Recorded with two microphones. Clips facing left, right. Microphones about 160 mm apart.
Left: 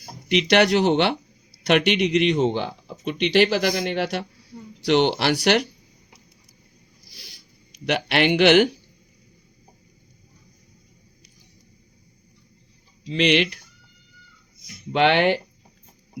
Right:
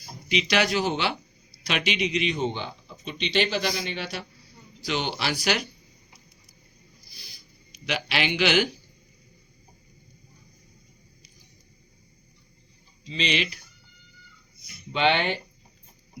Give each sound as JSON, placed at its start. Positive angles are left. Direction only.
{"t": 0.0, "sound": "speech", "side_deg": 60}
{"t": 7.1, "sound": "a sound", "side_deg": 90}
{"t": 7.9, "sound": "speech", "side_deg": 60}
{"t": 13.1, "sound": "speech", "side_deg": 70}
{"t": 14.9, "sound": "speech", "side_deg": 65}